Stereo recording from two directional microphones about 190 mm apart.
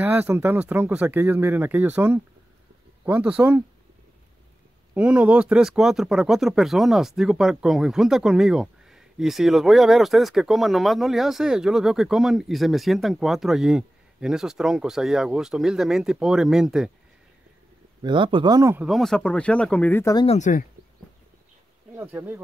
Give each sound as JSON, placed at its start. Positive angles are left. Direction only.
{"t": 0.0, "sound": "speech", "side_deg": -10}
{"t": 4.9, "sound": "speech", "side_deg": -5}
{"t": 18.0, "sound": "speech", "side_deg": -25}
{"t": 18.9, "sound": "speech", "side_deg": 0}
{"t": 20.2, "sound": "speech", "side_deg": 35}
{"t": 21.9, "sound": "speech", "side_deg": -10}